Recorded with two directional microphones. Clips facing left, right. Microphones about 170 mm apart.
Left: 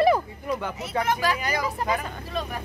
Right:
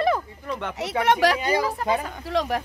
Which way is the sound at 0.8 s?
75° right (ahead or behind).